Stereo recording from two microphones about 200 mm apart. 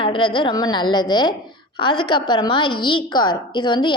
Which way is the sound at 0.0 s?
25° left (ahead or behind).